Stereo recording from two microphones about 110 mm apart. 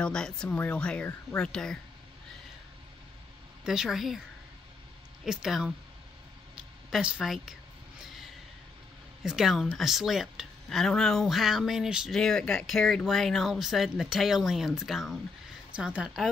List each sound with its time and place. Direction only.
0.0 s speech: 5° left (ahead or behind)
3.6 s speech: 5° right (ahead or behind)
5.2 s speech: 5° right (ahead or behind)
6.9 s speech: 5° right (ahead or behind)
8.0 s a sound: centre (ahead or behind)
9.2 s speech: 5° right (ahead or behind)
12.2 s speech: 5° left (ahead or behind); by 16.1 s 10° right (ahead or behind)